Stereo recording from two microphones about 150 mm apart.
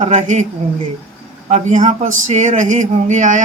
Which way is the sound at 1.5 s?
50° right (ahead or behind).